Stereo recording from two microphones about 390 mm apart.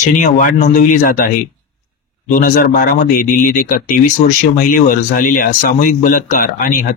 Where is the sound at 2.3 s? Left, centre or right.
Left.